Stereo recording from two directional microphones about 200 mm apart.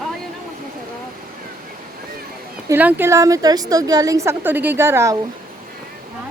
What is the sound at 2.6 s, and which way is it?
A woman's voice, 10° right (ahead or behind).